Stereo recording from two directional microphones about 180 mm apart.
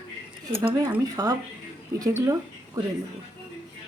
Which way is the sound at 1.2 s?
15° right (ahead or behind).